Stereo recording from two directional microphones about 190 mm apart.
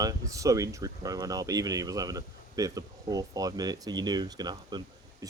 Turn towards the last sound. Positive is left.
turn(degrees=-20)  # may be behind; listen again after turning